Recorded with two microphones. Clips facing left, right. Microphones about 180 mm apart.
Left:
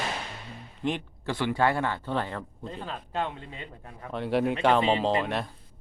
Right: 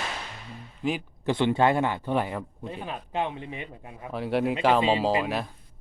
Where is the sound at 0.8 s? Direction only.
5° right (ahead or behind).